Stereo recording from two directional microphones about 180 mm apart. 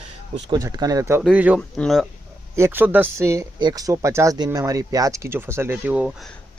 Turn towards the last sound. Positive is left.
turn(degrees=-10)  # may be behind; listen again after turning